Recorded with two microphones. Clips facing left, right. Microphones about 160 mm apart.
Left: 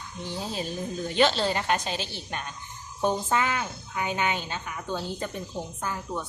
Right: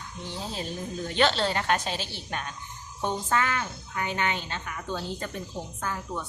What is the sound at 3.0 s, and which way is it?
A woman's voice, 10° left (ahead or behind).